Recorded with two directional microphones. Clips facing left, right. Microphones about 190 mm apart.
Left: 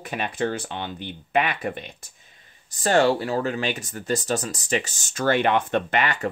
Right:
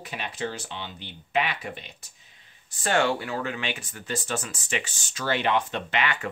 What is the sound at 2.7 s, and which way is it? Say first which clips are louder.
Speech: left 5 dB; 40° left (ahead or behind).